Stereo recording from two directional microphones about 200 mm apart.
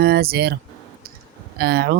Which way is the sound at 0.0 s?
50° right (ahead or behind).